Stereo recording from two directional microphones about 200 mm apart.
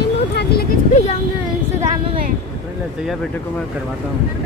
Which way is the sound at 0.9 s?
35° left (ahead or behind).